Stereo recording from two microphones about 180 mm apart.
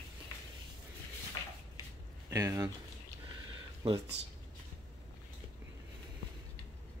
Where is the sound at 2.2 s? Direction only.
20° right (ahead or behind).